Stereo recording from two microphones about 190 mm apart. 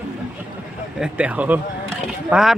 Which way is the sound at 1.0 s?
5° right (ahead or behind).